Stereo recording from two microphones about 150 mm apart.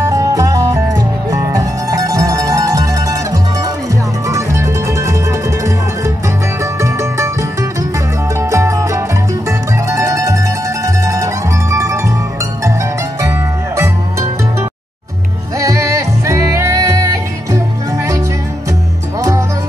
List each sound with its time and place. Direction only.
0.1 s music: 20° right (ahead or behind)
8.4 s music: 20° right (ahead or behind)
13.2 s music: 15° right (ahead or behind)
15.6 s music: 20° right (ahead or behind)